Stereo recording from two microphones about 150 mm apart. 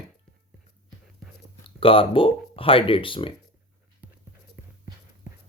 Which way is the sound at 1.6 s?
35° left (ahead or behind).